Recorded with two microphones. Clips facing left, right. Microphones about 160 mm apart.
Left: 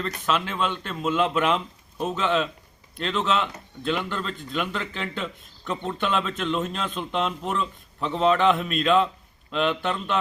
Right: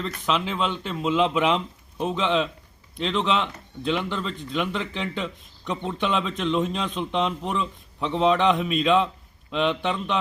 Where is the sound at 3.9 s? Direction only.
5° left (ahead or behind).